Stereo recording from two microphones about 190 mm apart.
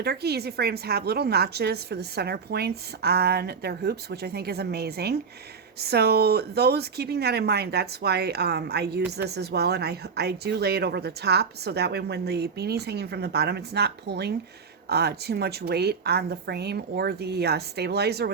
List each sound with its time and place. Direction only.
0.0 s speech: 60° right (ahead or behind)